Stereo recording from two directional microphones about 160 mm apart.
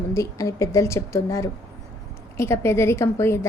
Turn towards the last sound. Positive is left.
turn(degrees=15)  # may be behind; listen again after turning